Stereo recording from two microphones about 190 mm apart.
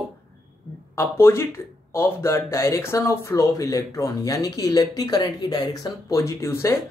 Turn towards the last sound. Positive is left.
turn(degrees=15)  # may be behind; listen again after turning